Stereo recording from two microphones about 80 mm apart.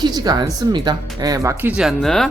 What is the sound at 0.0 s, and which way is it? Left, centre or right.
Speech, right.